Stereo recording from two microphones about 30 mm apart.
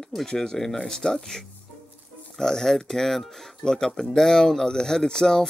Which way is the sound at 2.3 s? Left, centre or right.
Centre.